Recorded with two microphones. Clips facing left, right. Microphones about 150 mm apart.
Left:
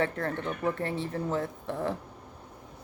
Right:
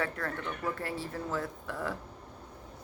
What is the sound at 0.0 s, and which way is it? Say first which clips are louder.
Speech: left 5 dB; 25° left (ahead or behind).